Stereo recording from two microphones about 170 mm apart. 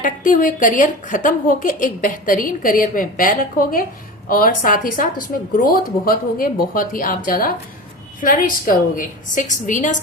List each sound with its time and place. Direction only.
0.0 s a woman's voice: 55° left (ahead or behind)